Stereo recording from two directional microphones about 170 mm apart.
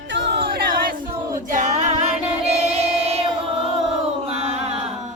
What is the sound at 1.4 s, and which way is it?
Singing, 45° right (ahead or behind).